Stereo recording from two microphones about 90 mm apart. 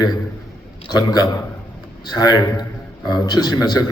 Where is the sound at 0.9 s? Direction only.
50° left (ahead or behind).